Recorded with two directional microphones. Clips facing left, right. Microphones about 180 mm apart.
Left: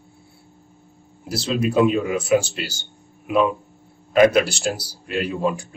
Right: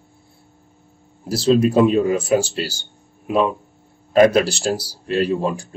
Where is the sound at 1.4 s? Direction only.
35° right (ahead or behind).